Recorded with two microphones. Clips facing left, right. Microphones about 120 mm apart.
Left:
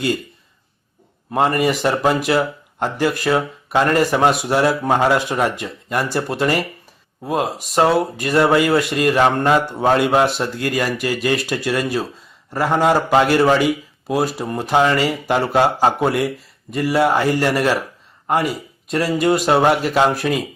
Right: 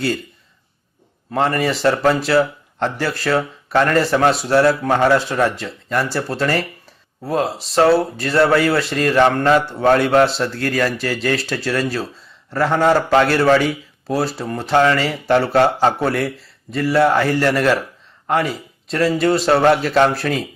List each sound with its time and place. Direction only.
1.3 s speech: 15° left (ahead or behind)